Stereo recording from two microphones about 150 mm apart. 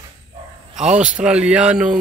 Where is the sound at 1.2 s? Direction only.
5° right (ahead or behind).